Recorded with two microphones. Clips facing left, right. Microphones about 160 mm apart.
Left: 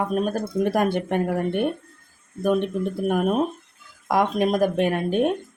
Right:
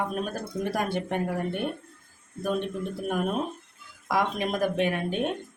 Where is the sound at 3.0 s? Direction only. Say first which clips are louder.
Left 6 dB; 55° left (ahead or behind).